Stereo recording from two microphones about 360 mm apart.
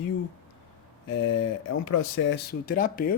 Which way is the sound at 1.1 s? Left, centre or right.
Left.